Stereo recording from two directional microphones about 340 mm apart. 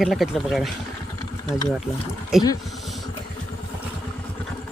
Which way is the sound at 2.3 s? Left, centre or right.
Centre.